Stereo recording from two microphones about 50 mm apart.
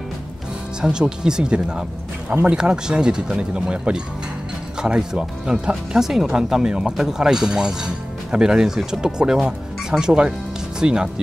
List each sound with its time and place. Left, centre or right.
0.7 s speech: centre